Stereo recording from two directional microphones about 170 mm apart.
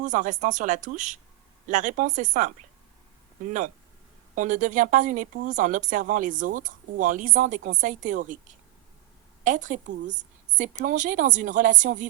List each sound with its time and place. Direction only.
0.0 s speech: 50° right (ahead or behind)
4.4 s speech: 50° right (ahead or behind)
9.4 s a woman's voice: 50° right (ahead or behind)